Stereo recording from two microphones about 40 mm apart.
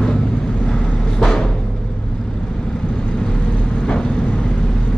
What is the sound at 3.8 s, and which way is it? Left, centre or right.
Vehicle, left.